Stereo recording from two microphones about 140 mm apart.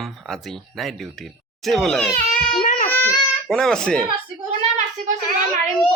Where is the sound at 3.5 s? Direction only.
5° left (ahead or behind).